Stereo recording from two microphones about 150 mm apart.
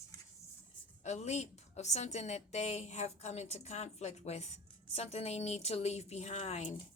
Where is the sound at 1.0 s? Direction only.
50° left (ahead or behind).